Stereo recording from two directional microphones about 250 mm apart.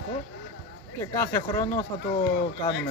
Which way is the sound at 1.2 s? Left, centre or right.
Centre.